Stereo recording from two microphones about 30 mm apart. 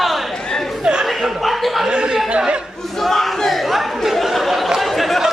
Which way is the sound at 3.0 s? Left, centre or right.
Centre.